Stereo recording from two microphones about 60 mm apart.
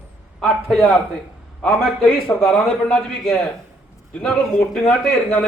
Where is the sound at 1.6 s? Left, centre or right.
Centre.